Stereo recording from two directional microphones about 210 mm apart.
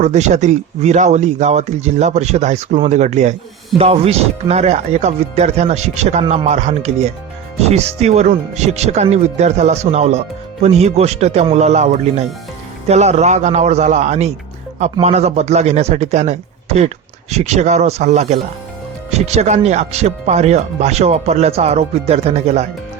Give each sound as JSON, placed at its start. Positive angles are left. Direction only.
{"t": 0.0, "sound": "speech", "side_deg": -35}